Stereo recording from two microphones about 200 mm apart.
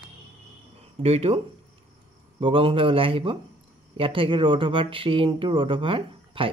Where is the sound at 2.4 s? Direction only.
25° right (ahead or behind).